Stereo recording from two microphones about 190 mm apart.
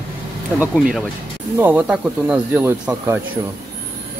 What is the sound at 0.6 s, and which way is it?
Speech, 5° right (ahead or behind).